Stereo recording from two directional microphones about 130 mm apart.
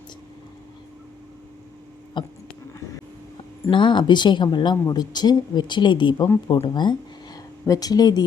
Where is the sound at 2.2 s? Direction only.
35° left (ahead or behind).